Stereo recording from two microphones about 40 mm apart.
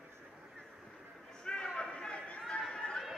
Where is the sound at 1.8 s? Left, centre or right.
Left.